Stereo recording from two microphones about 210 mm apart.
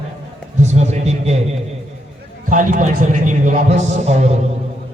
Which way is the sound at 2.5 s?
40° right (ahead or behind).